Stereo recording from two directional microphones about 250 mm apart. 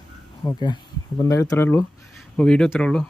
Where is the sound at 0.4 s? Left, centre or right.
Centre.